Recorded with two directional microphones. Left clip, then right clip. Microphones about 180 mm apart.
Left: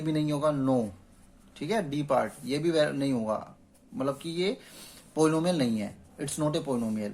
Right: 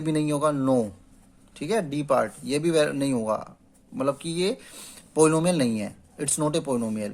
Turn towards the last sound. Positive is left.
turn(degrees=-40)  # may be behind; listen again after turning